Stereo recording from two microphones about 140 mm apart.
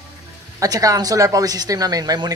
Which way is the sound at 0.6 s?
25° right (ahead or behind).